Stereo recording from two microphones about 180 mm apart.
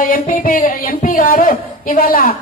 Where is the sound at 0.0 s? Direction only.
50° left (ahead or behind).